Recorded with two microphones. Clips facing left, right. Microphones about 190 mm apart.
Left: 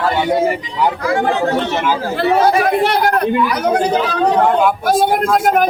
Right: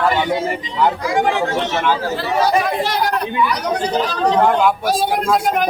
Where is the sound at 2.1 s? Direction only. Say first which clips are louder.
Left 7 dB; 60° left (ahead or behind).